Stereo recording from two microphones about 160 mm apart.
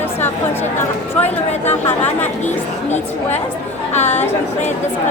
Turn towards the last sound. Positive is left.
turn(degrees=45)  # may be behind; listen again after turning